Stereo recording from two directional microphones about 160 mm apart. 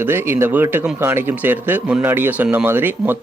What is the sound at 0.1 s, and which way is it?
Speech, 15° right (ahead or behind).